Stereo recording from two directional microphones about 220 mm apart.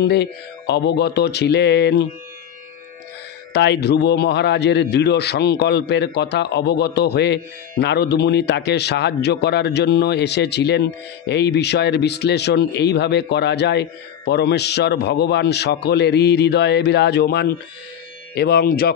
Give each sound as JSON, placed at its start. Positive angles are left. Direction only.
{"t": 0.0, "sound": "a man's voice", "side_deg": 50}
{"t": 3.5, "sound": "a man's voice", "side_deg": 50}